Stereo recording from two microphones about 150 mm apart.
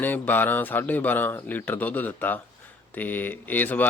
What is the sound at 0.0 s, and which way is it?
Speech, 10° left (ahead or behind).